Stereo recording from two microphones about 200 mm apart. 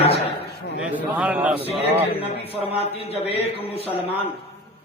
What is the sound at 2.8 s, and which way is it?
A man's voice, 30° left (ahead or behind).